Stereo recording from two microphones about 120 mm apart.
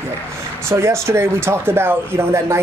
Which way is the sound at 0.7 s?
25° right (ahead or behind).